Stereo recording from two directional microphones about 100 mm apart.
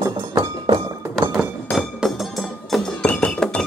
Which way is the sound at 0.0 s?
30° right (ahead or behind).